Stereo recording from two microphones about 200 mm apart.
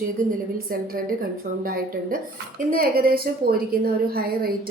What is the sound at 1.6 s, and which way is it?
A woman's voice, 45° right (ahead or behind).